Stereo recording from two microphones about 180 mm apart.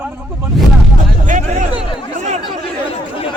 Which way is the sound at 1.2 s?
45° right (ahead or behind).